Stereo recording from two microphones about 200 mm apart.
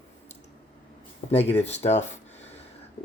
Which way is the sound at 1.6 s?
30° left (ahead or behind).